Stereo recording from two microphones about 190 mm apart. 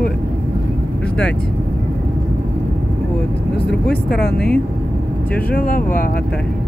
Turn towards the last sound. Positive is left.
turn(degrees=50)  # may be behind; listen again after turning